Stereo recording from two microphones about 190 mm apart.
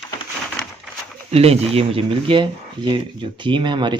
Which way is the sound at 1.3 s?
30° right (ahead or behind).